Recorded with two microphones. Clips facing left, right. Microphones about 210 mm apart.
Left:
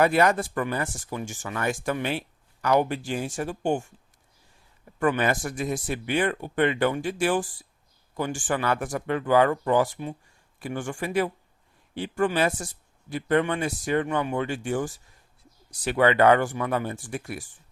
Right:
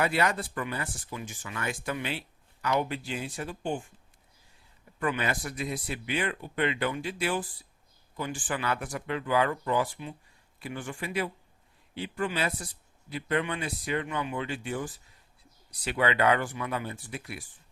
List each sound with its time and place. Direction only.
0.0 s speech: 50° left (ahead or behind)
4.9 s speech: 50° left (ahead or behind)